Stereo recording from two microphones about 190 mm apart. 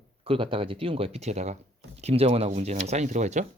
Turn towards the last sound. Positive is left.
turn(degrees=-40)  # may be behind; listen again after turning